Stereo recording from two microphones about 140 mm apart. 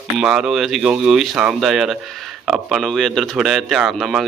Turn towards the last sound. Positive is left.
turn(degrees=0)  # may be behind; listen again after turning